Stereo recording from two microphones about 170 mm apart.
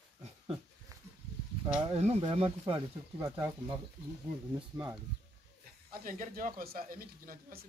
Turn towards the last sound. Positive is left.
turn(degrees=-55)  # may be behind; listen again after turning